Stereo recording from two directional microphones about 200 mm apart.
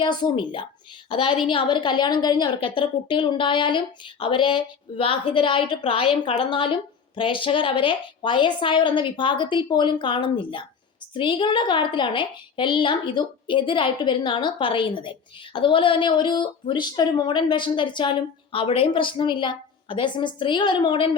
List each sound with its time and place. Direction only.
0.0 s a woman's voice: 20° left (ahead or behind)